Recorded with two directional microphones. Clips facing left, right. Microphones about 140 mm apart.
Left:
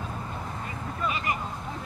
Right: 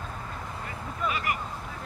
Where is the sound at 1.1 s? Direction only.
20° left (ahead or behind).